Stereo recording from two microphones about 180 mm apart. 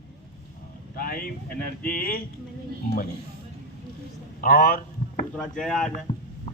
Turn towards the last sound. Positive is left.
turn(degrees=5)  # may be behind; listen again after turning